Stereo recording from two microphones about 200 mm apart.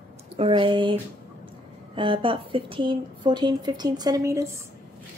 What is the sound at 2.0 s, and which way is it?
A woman's voice, 25° right (ahead or behind).